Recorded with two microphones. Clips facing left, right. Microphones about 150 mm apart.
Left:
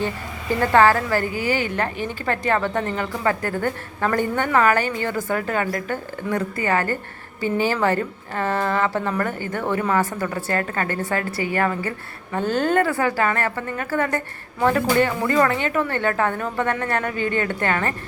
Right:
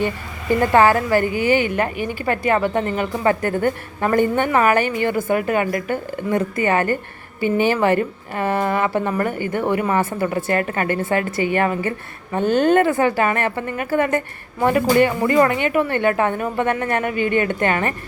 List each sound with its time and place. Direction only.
0.6 s a woman's voice: 15° right (ahead or behind)